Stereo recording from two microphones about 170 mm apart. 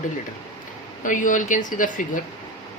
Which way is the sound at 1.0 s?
50° left (ahead or behind).